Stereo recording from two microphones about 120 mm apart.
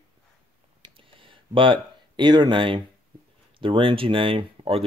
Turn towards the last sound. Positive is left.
turn(degrees=-50)  # may be behind; listen again after turning